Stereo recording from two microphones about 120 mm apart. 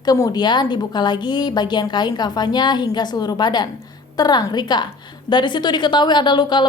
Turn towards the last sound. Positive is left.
turn(degrees=40)  # may be behind; listen again after turning